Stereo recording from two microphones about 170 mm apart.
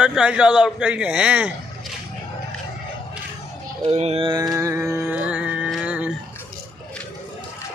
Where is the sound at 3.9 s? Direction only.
40° right (ahead or behind).